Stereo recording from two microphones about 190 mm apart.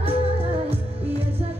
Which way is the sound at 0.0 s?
30° right (ahead or behind).